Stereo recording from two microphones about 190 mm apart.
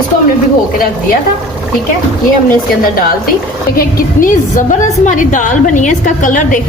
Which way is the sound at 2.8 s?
50° left (ahead or behind).